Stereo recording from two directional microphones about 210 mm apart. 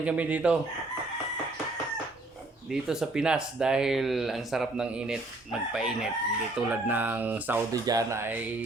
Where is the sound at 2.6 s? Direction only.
5° right (ahead or behind).